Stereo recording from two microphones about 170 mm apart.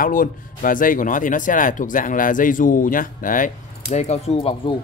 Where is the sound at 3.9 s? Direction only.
40° left (ahead or behind).